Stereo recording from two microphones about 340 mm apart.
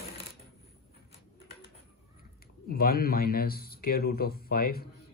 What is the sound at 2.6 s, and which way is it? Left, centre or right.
Speech, left.